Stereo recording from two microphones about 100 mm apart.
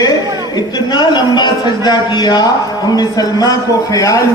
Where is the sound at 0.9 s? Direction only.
45° left (ahead or behind).